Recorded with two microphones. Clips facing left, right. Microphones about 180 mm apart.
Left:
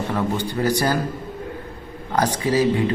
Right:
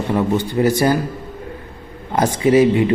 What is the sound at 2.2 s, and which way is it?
Speech, 20° right (ahead or behind).